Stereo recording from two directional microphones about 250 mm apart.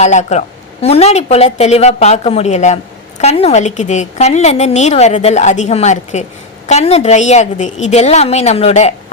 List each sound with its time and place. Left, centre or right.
0.0 s a woman's voice: left